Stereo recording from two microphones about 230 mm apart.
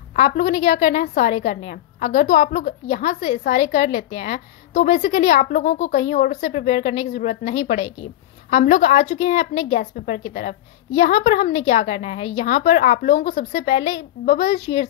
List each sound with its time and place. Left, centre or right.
0.1 s a woman's voice: left